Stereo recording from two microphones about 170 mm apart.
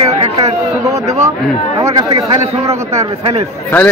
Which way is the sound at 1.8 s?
20° right (ahead or behind).